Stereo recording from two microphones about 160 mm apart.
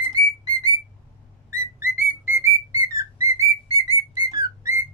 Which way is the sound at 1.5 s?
15° right (ahead or behind).